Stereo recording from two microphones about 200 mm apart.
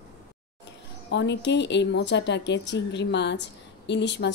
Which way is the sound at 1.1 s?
60° left (ahead or behind).